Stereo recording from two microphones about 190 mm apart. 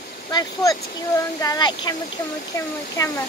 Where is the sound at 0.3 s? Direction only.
20° left (ahead or behind).